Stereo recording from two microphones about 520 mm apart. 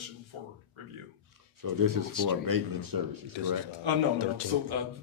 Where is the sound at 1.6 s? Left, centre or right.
Right.